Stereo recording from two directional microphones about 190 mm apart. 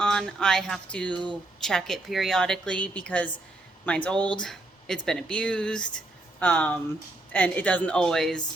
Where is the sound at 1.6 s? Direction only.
Centre (ahead or behind).